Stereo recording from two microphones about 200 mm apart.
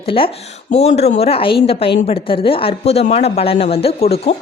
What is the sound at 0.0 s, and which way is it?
A woman's voice, 25° left (ahead or behind).